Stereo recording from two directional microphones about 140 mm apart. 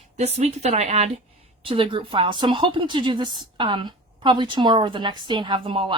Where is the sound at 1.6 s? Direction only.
40° right (ahead or behind).